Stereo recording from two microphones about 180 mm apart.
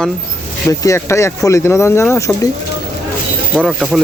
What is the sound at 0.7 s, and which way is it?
Speech, 20° left (ahead or behind).